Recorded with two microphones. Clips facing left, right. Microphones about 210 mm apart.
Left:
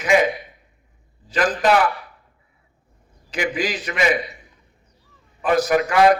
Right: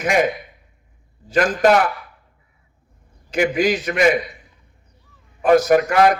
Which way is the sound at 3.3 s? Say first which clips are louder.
Right 6 dB; 45° right (ahead or behind).